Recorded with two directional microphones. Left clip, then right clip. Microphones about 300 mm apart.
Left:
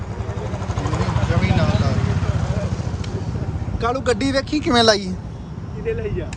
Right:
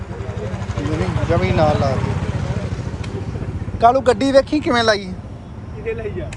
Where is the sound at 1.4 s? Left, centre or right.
Centre.